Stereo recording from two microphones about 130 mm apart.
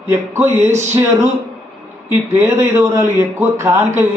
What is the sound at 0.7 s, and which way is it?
Speech, 60° right (ahead or behind).